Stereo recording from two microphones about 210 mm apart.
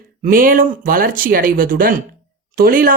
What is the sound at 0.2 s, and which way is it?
Speech, 40° right (ahead or behind).